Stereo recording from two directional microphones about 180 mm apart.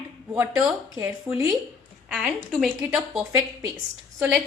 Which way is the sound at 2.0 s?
Centre (ahead or behind).